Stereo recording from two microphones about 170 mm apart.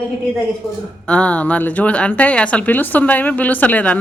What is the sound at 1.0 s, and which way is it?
Speech, 5° left (ahead or behind).